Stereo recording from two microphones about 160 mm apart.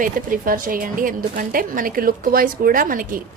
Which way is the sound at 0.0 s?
60° right (ahead or behind).